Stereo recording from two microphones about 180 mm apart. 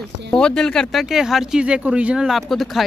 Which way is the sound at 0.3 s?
5° left (ahead or behind).